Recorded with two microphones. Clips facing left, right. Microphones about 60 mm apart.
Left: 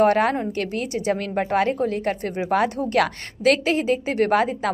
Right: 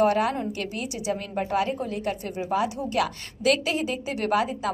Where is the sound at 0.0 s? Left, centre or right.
Left.